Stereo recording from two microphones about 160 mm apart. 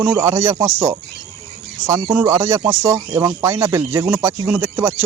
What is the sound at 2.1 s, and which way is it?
Speech, 15° right (ahead or behind).